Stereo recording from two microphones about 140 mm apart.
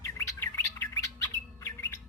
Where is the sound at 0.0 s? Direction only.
20° left (ahead or behind).